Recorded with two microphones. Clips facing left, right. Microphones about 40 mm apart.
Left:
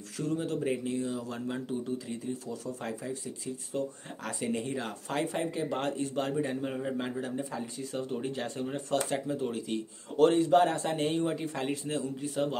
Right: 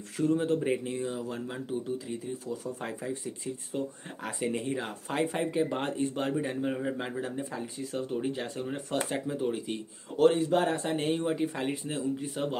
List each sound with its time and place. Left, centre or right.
0.2 s speech: right; by 8.8 s centre
9.1 s speech: centre
10.1 s speech: centre